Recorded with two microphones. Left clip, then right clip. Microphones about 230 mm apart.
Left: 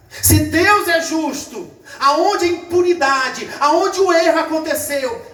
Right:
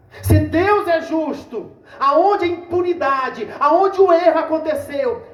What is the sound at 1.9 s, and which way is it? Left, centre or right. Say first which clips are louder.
Speech: even; right.